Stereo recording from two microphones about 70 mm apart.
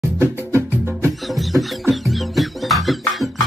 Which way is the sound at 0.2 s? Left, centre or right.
Right.